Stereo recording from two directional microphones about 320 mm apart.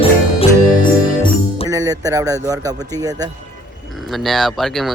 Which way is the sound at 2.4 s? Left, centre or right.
Centre.